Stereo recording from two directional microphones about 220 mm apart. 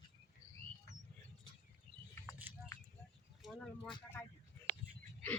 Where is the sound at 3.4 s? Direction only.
5° left (ahead or behind).